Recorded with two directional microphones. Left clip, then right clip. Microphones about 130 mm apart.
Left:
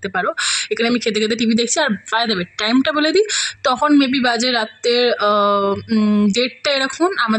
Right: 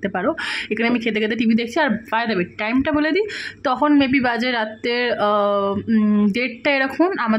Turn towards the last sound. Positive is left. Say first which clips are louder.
# left 2 dB
turn(degrees=30)  # may be behind; listen again after turning